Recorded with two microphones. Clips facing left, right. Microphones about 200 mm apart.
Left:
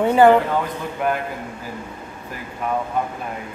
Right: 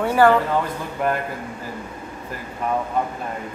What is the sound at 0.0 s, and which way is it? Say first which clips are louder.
Speech: left 3 dB; 20° left (ahead or behind).